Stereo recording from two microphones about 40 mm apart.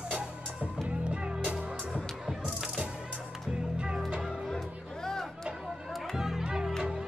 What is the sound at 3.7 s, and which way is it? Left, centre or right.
Music, centre.